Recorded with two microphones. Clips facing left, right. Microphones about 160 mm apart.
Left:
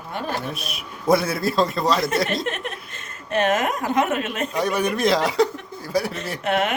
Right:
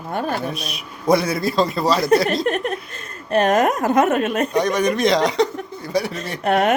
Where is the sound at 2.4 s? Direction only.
40° right (ahead or behind).